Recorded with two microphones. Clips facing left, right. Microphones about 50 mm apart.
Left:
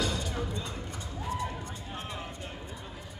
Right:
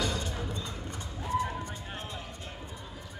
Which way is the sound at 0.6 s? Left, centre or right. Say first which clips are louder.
Left 1 dB; left.